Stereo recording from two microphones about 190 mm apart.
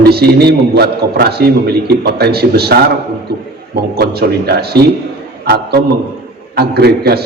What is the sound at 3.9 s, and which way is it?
Speech, 55° right (ahead or behind).